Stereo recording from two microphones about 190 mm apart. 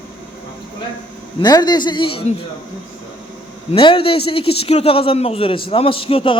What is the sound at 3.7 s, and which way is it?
A man's voice, 30° left (ahead or behind).